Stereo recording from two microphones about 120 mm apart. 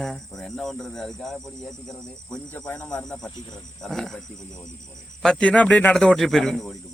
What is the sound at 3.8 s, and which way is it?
Speech, 5° left (ahead or behind).